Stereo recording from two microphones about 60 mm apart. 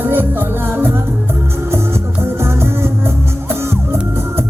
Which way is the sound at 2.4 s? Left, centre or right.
Right.